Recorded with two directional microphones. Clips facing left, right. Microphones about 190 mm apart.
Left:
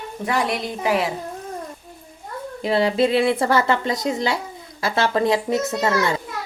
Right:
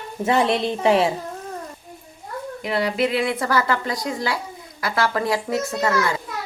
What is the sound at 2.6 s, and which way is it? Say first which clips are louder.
Speech: left 4 dB; 25° left (ahead or behind).